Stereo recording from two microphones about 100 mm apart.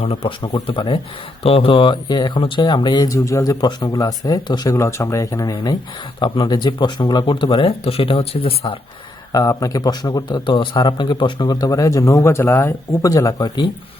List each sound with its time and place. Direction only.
0.0 s speech: 80° left
0.4 s speech: 55° left (ahead or behind)
1.5 s speech: 65° left (ahead or behind); by 3.1 s 50° left (ahead or behind)
3.1 s speech: 35° left (ahead or behind)
4.7 s speech: 30° left (ahead or behind)
6.1 s speech: 50° left (ahead or behind); by 8.8 s 70° left (ahead or behind)
9.3 s speech: 40° left (ahead or behind)